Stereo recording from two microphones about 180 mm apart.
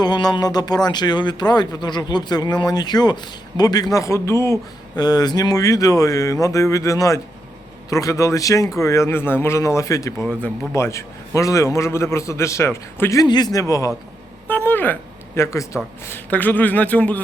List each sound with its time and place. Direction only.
0.0 s a man's voice: 25° left (ahead or behind)